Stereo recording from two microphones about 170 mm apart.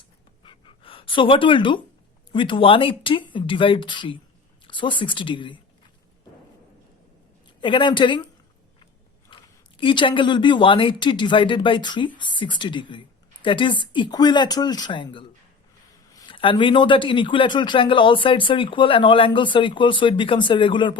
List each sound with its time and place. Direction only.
0.4 s a sound: 30° left (ahead or behind)
2.3 s speech: 30° left (ahead or behind)
7.6 s speech: 30° left (ahead or behind)
9.3 s speech: 30° left (ahead or behind)